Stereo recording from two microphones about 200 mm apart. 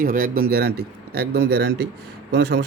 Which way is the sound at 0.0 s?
45° right (ahead or behind).